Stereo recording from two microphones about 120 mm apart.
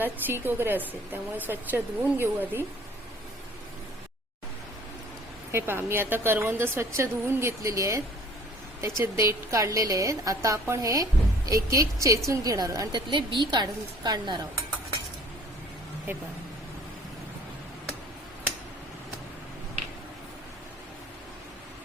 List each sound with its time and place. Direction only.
0.0 s speech: 15° right (ahead or behind)
5.5 s a woman's voice: 20° right (ahead or behind); by 14.4 s 35° right (ahead or behind)